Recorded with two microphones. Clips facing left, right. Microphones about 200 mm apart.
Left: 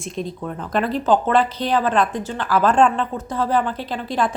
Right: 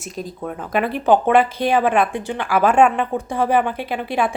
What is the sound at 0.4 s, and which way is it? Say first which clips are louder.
Speech: right 2 dB; 5° right (ahead or behind).